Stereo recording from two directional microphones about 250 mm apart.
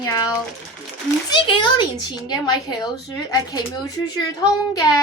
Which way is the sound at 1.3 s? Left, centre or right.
Centre.